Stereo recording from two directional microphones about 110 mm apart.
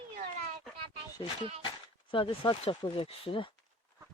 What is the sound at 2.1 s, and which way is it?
Speech, 50° left (ahead or behind).